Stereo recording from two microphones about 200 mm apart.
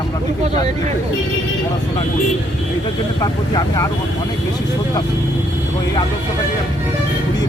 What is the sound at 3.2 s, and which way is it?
Speech, 20° left (ahead or behind).